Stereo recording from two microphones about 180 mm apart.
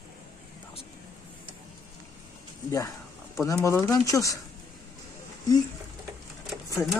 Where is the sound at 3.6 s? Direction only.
15° left (ahead or behind).